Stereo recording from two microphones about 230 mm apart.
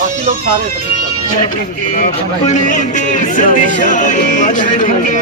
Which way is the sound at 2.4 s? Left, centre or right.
Left.